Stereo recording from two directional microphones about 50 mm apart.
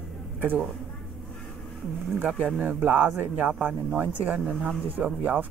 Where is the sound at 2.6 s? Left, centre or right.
Right.